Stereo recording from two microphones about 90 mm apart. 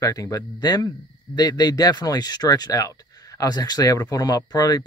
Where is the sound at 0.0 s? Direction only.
40° left (ahead or behind).